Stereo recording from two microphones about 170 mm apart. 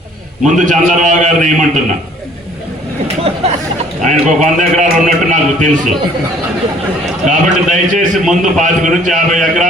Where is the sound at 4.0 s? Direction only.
45° right (ahead or behind).